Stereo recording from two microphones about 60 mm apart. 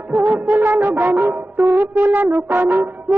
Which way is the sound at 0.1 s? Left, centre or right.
Right.